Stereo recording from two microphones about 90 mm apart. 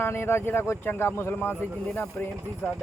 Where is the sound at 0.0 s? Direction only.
25° left (ahead or behind).